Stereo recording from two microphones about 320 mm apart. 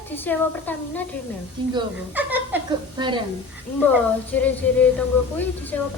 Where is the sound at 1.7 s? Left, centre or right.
Centre.